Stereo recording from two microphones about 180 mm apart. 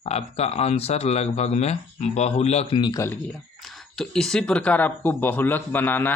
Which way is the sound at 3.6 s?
Centre (ahead or behind).